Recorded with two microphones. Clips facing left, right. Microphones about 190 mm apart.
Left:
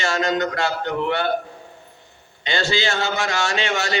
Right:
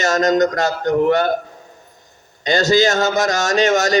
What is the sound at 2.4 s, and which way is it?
A man's voice, 40° right (ahead or behind).